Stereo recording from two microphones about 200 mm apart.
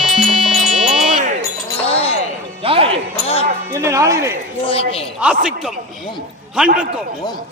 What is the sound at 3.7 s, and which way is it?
Music, 15° right (ahead or behind).